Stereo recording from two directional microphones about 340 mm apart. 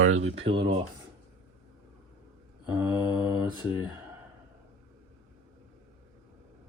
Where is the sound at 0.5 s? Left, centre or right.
Centre.